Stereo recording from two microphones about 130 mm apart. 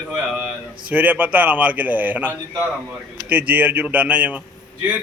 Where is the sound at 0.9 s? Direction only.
10° right (ahead or behind).